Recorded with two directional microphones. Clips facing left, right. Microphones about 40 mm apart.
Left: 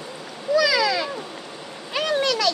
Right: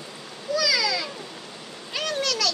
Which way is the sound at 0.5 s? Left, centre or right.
Left.